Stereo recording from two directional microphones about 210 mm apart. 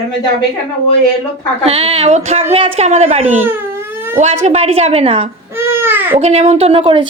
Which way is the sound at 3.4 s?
10° right (ahead or behind).